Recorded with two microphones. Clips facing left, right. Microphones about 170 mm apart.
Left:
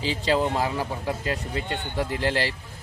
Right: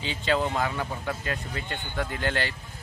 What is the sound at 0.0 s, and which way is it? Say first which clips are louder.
A man's voice: left 3 dB; 35° left (ahead or behind).